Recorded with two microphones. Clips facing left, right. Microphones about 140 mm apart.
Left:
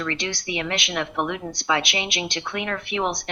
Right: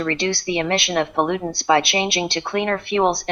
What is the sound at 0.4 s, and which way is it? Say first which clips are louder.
A woman's voice: right 6 dB; 40° right (ahead or behind).